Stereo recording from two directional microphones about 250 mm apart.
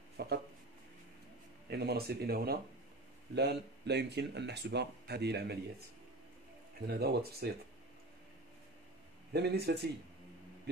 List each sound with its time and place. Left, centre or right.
0.2 s speech: right
1.7 s speech: right
6.9 s speech: right
9.3 s speech: right